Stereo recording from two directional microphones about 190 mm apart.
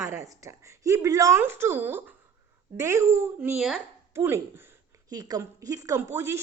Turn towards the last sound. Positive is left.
turn(degrees=-15)  # may be behind; listen again after turning